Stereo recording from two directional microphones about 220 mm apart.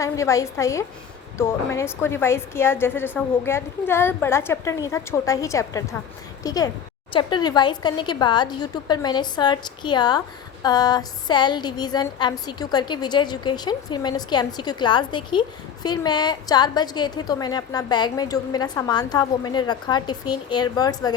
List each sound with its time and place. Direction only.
0.0 s a woman's voice: 15° left (ahead or behind)